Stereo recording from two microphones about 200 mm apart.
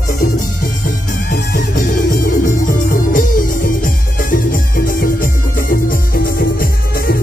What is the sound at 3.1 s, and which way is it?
Music, 45° left (ahead or behind).